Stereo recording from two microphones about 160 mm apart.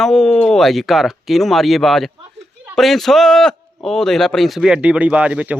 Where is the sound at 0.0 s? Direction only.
Centre (ahead or behind).